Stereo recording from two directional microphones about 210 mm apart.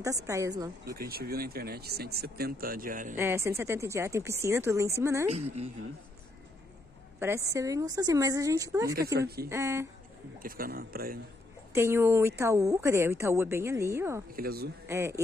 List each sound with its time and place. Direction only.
0.0 s a woman's voice: 15° right (ahead or behind)
0.9 s speech: 45° right (ahead or behind)
3.2 s a woman's voice: 10° right (ahead or behind)
5.3 s a woman's voice: 30° right (ahead or behind)
7.2 s a woman's voice: 10° right (ahead or behind)
10.4 s speech: 45° right (ahead or behind)
11.7 s a woman's voice: 10° right (ahead or behind)
14.3 s speech: 45° right (ahead or behind)
14.9 s a woman's voice: 15° right (ahead or behind)